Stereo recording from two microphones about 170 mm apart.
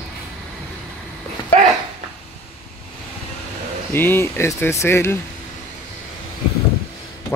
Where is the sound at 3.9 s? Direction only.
10° left (ahead or behind).